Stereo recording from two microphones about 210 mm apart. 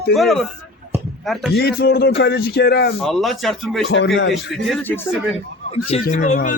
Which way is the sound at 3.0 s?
Centre (ahead or behind).